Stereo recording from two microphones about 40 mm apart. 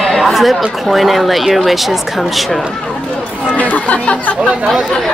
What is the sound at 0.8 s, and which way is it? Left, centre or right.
Speech, centre.